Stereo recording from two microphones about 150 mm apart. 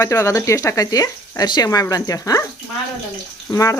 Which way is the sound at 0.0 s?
15° left (ahead or behind).